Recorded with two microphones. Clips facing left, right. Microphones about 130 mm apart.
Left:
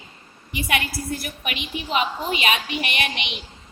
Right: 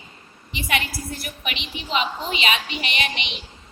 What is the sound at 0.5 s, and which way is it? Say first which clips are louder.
A woman's voice: left 1 dB; 50° left (ahead or behind).